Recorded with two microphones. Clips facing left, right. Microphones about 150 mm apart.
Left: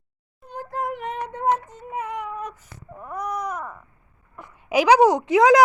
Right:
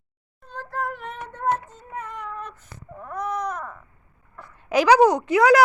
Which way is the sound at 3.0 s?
10° left (ahead or behind).